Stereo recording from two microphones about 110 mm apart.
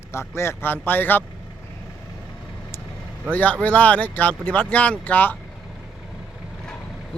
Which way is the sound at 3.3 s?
15° left (ahead or behind).